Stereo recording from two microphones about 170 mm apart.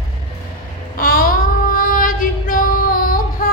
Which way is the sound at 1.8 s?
50° left (ahead or behind).